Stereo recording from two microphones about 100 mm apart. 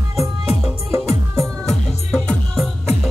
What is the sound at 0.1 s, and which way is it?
Music, centre (ahead or behind).